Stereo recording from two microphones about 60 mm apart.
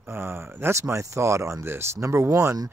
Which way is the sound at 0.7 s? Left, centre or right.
Right.